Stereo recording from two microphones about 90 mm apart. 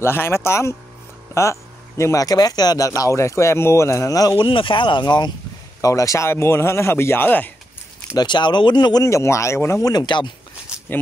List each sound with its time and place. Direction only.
0.0 s speech: 25° left (ahead or behind)
4.4 s speech: 70° left (ahead or behind); by 5.3 s 50° left (ahead or behind)
5.8 s speech: 40° left (ahead or behind); by 7.5 s 20° left (ahead or behind)
8.2 s speech: 60° left (ahead or behind)
9.0 s speech: 35° left (ahead or behind)
9.8 s speech: 50° left (ahead or behind)